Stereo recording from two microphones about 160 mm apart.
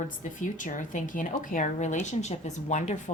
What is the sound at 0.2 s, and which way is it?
Speech, 50° left (ahead or behind).